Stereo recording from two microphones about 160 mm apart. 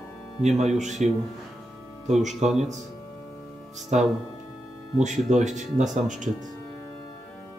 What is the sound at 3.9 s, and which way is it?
Speech, 45° right (ahead or behind).